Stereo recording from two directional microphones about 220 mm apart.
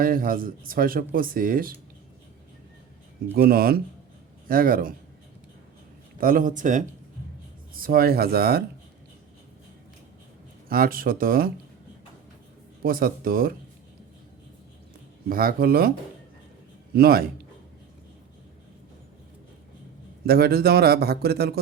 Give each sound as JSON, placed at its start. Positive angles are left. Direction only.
{"t": 0.0, "sound": "speech", "side_deg": -40}
{"t": 3.3, "sound": "a man's voice", "side_deg": -45}
{"t": 6.1, "sound": "a man's voice", "side_deg": -40}
{"t": 10.7, "sound": "speech", "side_deg": -40}
{"t": 12.8, "sound": "speech", "side_deg": -40}
{"t": 15.3, "sound": "a man's voice", "side_deg": -40}
{"t": 16.9, "sound": "a man's voice", "side_deg": -45}
{"t": 20.2, "sound": "a man's voice", "side_deg": -45}